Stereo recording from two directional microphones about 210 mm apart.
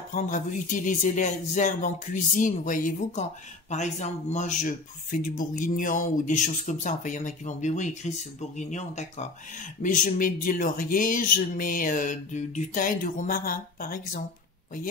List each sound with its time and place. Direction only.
0.1 s speech: 35° left (ahead or behind)